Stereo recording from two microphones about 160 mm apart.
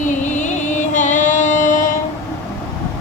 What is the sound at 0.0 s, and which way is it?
Music, 50° left (ahead or behind).